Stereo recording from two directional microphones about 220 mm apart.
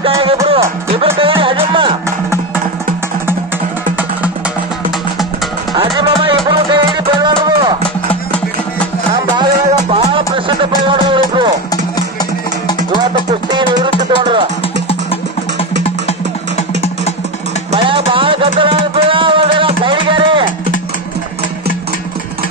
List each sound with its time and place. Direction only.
0.1 s music: 20° right (ahead or behind)
5.9 s music: 20° right (ahead or behind)
9.1 s music: 20° right (ahead or behind)
17.6 s music: 25° right (ahead or behind)